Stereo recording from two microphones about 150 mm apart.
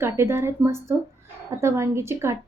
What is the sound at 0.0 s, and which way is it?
A woman's voice, 15° right (ahead or behind).